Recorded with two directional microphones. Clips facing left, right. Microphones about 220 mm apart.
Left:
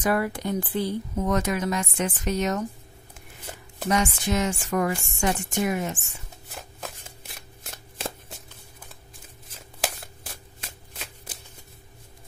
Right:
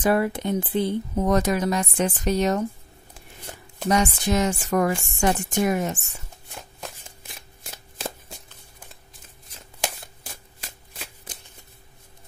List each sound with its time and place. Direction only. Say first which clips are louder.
0.0 s speech: right 3 dB; 25° right (ahead or behind)
1.2 s a woman's voice: right 4 dB; 35° right (ahead or behind)
3.9 s a woman's voice: right 3 dB; 35° right (ahead or behind)
6.5 s shuffling cards: even; centre (ahead or behind)
9.5 s shuffling cards: even; centre (ahead or behind)